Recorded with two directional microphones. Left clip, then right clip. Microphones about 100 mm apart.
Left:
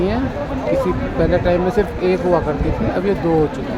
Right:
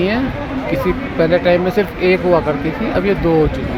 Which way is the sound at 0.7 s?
Centre (ahead or behind).